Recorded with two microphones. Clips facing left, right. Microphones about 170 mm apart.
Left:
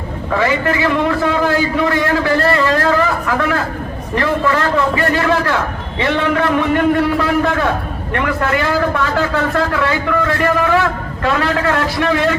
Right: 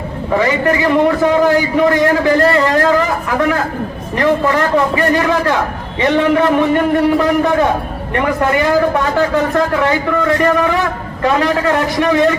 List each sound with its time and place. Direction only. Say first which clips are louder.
0.3 s a man's voice: right 2 dB; 15° right (ahead or behind)